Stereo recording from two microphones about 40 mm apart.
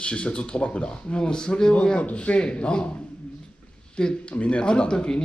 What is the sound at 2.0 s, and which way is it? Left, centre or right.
Speech, left.